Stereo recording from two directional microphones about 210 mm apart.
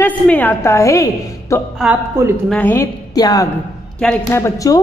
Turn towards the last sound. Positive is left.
turn(degrees=15)  # may be behind; listen again after turning